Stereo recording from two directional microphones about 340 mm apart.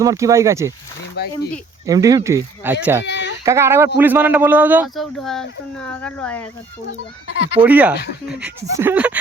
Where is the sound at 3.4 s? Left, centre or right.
Centre.